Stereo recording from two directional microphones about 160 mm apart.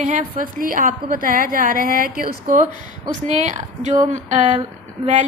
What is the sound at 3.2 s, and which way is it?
A woman's voice, 45° right (ahead or behind).